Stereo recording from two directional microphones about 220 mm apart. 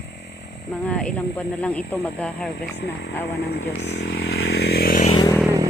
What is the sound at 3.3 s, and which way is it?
Speech, 45° left (ahead or behind).